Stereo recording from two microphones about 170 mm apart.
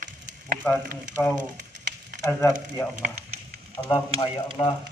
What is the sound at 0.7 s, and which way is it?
Speech, 10° left (ahead or behind).